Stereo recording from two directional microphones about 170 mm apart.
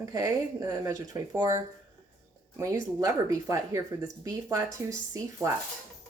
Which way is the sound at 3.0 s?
20° right (ahead or behind).